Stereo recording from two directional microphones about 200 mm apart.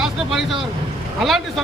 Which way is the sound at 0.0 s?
Centre (ahead or behind).